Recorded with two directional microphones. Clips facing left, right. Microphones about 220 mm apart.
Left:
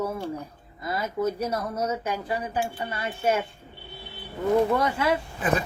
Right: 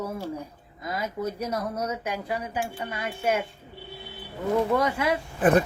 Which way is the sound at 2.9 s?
10° right (ahead or behind).